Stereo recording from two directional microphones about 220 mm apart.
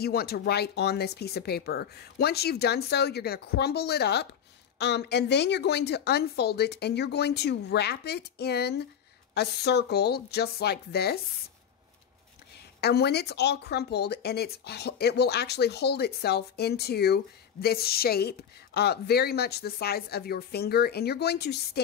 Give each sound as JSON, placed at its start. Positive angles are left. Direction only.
{"t": 0.0, "sound": "speech", "side_deg": 45}
{"t": 12.8, "sound": "speech", "side_deg": 45}